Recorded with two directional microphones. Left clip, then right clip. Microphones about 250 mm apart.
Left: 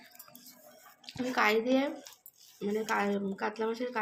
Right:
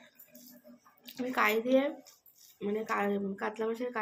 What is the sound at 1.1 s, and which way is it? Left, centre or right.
Speech, centre.